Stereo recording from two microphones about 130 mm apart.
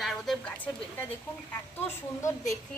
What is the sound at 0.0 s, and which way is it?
Speech, centre (ahead or behind).